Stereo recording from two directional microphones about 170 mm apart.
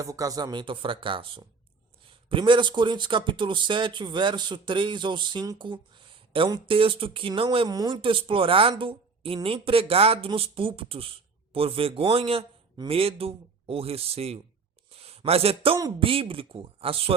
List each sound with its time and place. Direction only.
0.0 s speech: 20° right (ahead or behind); by 14.4 s 35° right (ahead or behind)
15.0 s a sound: 35° right (ahead or behind)
15.8 s speech: 30° right (ahead or behind)